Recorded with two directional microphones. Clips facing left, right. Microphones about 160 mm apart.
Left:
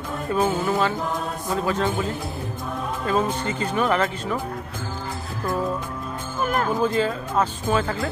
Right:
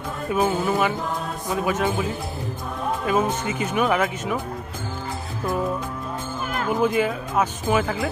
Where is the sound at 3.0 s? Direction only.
15° right (ahead or behind).